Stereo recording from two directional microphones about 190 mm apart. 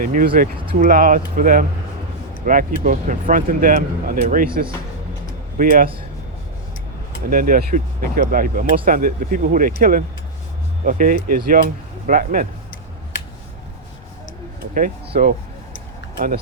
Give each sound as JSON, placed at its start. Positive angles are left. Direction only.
{"t": 0.0, "sound": "speech", "side_deg": -50}
{"t": 7.3, "sound": "speech", "side_deg": -50}
{"t": 14.7, "sound": "speech", "side_deg": -50}